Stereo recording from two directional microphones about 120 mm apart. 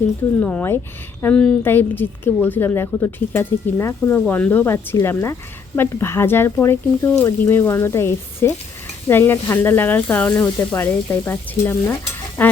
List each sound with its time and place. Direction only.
0.3 s a woman's voice: 15° left (ahead or behind)